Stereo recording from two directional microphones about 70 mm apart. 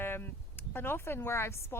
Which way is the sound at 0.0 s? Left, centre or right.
Left.